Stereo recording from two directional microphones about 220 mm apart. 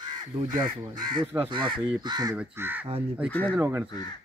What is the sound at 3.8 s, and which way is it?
Speech, 20° left (ahead or behind).